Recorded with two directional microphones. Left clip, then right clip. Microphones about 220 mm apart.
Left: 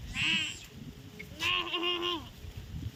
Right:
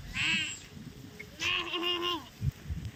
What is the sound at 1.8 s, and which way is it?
Goat, 45° right (ahead or behind).